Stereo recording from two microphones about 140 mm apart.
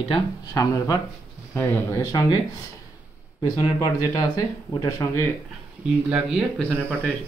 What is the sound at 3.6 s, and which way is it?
Speech, 30° left (ahead or behind).